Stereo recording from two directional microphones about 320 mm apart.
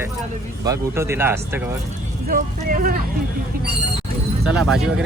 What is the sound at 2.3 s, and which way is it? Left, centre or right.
Speech, right.